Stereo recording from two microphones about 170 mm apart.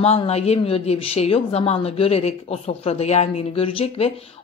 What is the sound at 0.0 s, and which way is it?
Speech, 40° left (ahead or behind).